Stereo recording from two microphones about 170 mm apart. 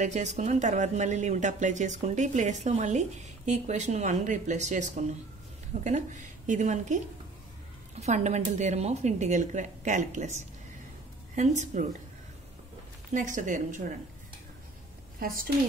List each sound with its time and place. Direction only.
0.0 s speech: 45° right (ahead or behind)
8.0 s speech: 45° right (ahead or behind)
11.3 s speech: 40° right (ahead or behind)
13.1 s speech: 50° right (ahead or behind)
15.1 s a woman's voice: 55° right (ahead or behind)